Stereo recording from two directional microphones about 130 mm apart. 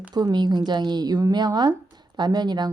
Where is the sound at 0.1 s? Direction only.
35° right (ahead or behind).